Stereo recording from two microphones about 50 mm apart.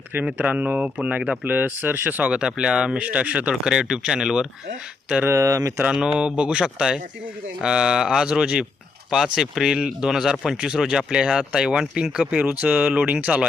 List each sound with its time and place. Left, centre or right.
0.3 s speech: right
1.5 s speech: right
2.4 s speech: centre
5.3 s speech: right
5.9 s speech: centre
12.4 s speech: right
12.7 s speech: centre